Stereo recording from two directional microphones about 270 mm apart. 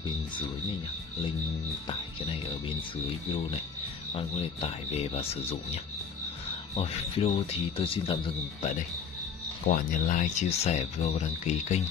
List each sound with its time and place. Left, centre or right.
4.1 s speech: left
6.8 s speech: left
9.7 s speech: left